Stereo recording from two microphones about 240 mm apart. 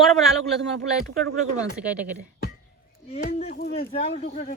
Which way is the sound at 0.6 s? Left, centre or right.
Right.